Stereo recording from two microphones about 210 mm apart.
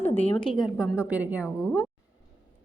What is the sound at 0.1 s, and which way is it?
Speech, 30° left (ahead or behind).